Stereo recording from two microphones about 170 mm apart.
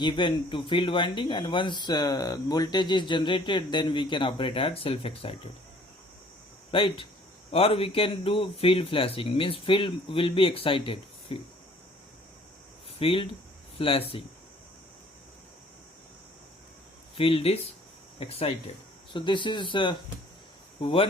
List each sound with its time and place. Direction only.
0.0 s speech: 30° left (ahead or behind)
6.7 s speech: 30° left (ahead or behind)
13.0 s speech: 35° left (ahead or behind)
17.2 s speech: 35° left (ahead or behind)